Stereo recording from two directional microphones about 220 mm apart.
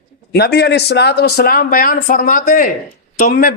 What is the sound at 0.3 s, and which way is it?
Speech, 50° left (ahead or behind).